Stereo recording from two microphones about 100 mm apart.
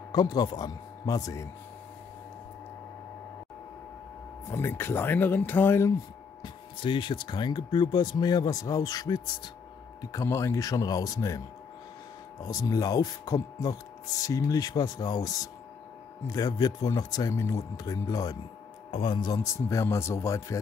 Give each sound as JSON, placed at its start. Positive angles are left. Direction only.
{"t": 0.1, "sound": "speech", "side_deg": 45}
{"t": 4.5, "sound": "speech", "side_deg": 25}
{"t": 6.4, "sound": "speech", "side_deg": 55}
{"t": 10.1, "sound": "speech", "side_deg": 30}
{"t": 12.4, "sound": "speech", "side_deg": 40}
{"t": 18.9, "sound": "speech", "side_deg": 55}
{"t": 19.3, "sound": "speech", "side_deg": 30}